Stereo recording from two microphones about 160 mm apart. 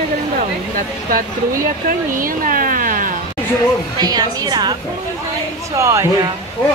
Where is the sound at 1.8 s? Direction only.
60° right (ahead or behind).